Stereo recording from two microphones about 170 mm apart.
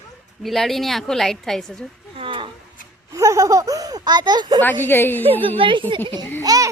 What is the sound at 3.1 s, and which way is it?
Baby laughter, 20° right (ahead or behind).